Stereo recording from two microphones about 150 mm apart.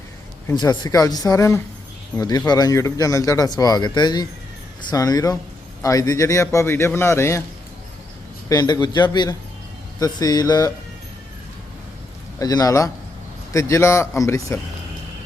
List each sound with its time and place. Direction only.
0.5 s speech: 25° left (ahead or behind)
8.4 s speech: 25° left (ahead or behind)
12.4 s speech: 25° left (ahead or behind)